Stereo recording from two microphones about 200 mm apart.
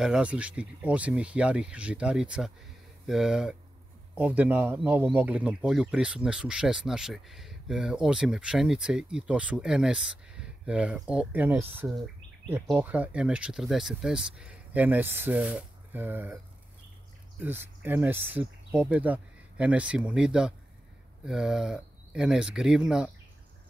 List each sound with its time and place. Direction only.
0.0 s speech: 5° right (ahead or behind)
17.4 s speech: 10° right (ahead or behind)